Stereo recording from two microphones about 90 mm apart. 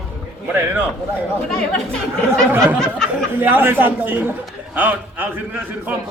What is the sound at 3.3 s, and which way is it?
A man's voice, 25° right (ahead or behind).